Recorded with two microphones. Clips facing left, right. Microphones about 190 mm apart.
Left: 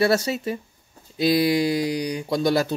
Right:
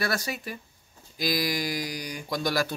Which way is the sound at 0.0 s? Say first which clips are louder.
Left 10 dB; 25° left (ahead or behind).